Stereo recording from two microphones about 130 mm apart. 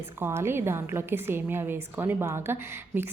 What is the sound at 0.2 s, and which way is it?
A woman's voice, 20° right (ahead or behind).